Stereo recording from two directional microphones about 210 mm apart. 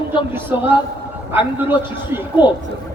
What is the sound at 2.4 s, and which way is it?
Speech, 20° left (ahead or behind).